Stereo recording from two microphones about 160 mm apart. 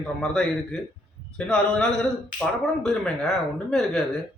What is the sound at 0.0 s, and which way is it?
A man's voice, 5° left (ahead or behind).